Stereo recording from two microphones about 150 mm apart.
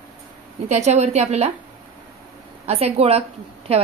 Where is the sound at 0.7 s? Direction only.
50° right (ahead or behind).